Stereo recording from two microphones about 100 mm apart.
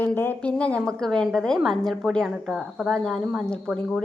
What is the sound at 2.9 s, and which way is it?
Speech, 5° left (ahead or behind).